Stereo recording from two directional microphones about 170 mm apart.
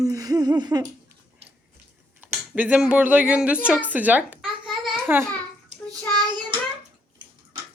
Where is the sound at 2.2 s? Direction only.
10° right (ahead or behind).